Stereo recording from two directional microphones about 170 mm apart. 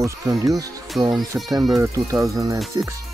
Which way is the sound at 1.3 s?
10° right (ahead or behind).